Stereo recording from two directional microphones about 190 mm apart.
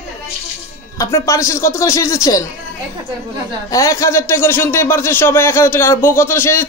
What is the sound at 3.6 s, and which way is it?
Speech, 15° left (ahead or behind).